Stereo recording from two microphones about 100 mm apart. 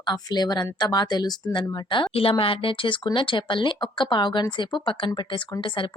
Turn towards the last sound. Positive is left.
turn(degrees=55)  # may be behind; listen again after turning